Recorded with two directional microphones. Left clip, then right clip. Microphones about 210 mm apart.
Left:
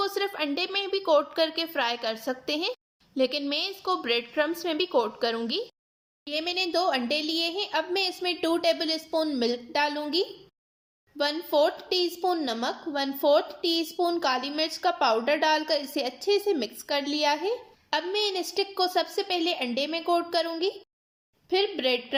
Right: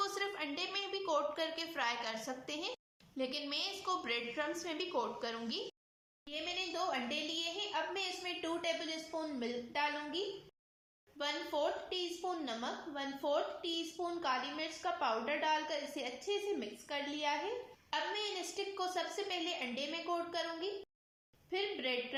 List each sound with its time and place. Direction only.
0.0 s a woman's voice: 40° left (ahead or behind)